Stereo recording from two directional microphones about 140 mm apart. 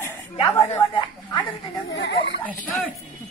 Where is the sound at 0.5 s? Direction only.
20° left (ahead or behind).